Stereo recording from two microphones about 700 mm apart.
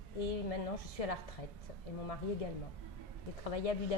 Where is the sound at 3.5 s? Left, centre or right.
Left.